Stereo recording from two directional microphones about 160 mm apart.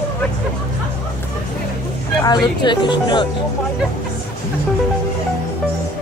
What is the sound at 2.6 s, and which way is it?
Speech, 30° left (ahead or behind).